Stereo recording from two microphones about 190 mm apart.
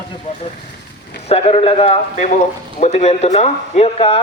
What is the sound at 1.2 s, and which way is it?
Speech, 35° left (ahead or behind).